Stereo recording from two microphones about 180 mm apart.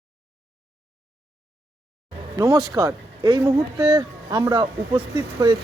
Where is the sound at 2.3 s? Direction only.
20° right (ahead or behind).